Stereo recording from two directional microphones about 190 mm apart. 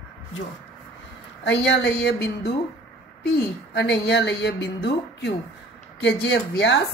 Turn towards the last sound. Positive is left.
turn(degrees=65)  # may be behind; listen again after turning